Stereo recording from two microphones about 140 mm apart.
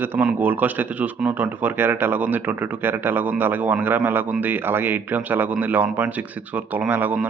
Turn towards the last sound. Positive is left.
turn(degrees=-10)  # may be behind; listen again after turning